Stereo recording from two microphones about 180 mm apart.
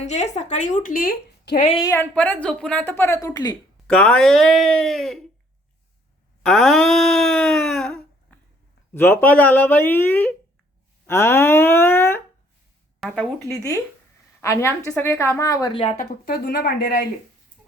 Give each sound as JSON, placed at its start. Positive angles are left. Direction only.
{"t": 0.0, "sound": "a woman's voice", "side_deg": 40}
{"t": 1.6, "sound": "a sound", "side_deg": 25}
{"t": 1.9, "sound": "speech", "side_deg": 10}
{"t": 3.8, "sound": "speech", "side_deg": 5}
{"t": 6.4, "sound": "a sound", "side_deg": 0}
{"t": 8.9, "sound": "speech", "side_deg": 10}
{"t": 11.0, "sound": "a sound", "side_deg": 15}
{"t": 13.5, "sound": "speech", "side_deg": 15}
{"t": 16.0, "sound": "a woman's voice", "side_deg": 55}